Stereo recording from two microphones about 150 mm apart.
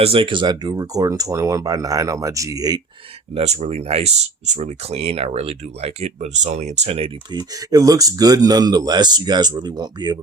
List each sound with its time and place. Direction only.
0.0 s speech: 40° right (ahead or behind)
3.3 s speech: 45° right (ahead or behind)
7.5 s speech: 25° right (ahead or behind)